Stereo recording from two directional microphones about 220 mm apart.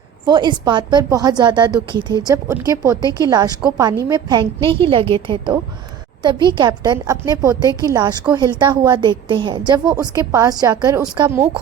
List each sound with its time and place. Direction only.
0.3 s a woman's voice: 20° right (ahead or behind)